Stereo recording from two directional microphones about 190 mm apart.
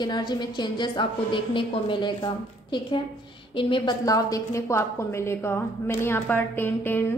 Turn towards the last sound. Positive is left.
turn(degrees=10)  # may be behind; listen again after turning